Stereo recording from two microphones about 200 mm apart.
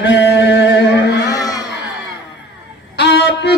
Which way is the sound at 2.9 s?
55° left (ahead or behind).